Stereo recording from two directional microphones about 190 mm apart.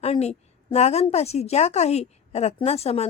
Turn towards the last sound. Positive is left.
turn(degrees=35)  # may be behind; listen again after turning